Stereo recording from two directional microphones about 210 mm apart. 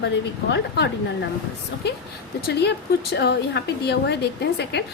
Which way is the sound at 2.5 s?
50° left (ahead or behind).